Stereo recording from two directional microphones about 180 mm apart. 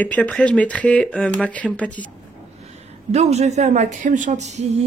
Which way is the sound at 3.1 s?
35° right (ahead or behind).